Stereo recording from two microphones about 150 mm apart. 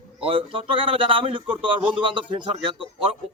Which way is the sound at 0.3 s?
35° right (ahead or behind).